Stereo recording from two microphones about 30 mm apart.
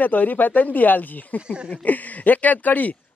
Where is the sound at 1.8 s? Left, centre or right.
Left.